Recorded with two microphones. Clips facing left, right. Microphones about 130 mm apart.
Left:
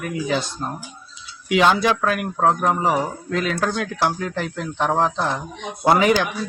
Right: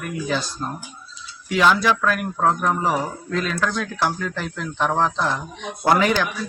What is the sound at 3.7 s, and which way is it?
Speech, 60° left (ahead or behind).